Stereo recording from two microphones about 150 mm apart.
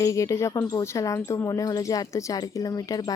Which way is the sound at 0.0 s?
20° left (ahead or behind).